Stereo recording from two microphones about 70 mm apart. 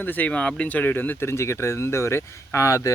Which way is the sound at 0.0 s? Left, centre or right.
Left.